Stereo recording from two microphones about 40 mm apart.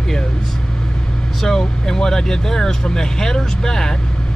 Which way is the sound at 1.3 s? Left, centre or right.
Centre.